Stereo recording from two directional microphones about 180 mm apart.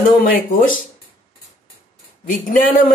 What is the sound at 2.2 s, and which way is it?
Speech, 50° left (ahead or behind).